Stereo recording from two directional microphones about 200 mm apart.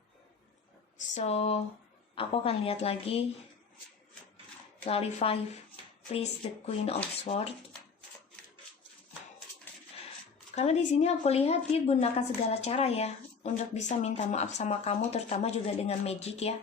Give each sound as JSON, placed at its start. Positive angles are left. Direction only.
{"t": 0.9, "sound": "a woman's voice", "side_deg": 35}
{"t": 4.9, "sound": "a woman's voice", "side_deg": 30}
{"t": 6.7, "sound": "a woman's voice", "side_deg": 30}
{"t": 10.5, "sound": "speech", "side_deg": 35}